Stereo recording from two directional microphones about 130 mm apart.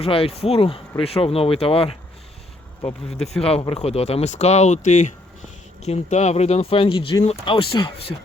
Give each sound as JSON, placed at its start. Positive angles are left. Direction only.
{"t": 0.0, "sound": "speech", "side_deg": 45}
{"t": 3.4, "sound": "speech", "side_deg": 45}
{"t": 5.8, "sound": "speech", "side_deg": 60}